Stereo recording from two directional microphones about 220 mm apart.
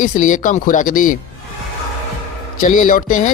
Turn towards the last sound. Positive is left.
turn(degrees=35)  # may be behind; listen again after turning